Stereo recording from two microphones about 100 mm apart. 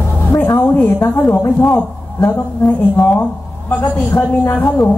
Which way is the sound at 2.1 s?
30° left (ahead or behind).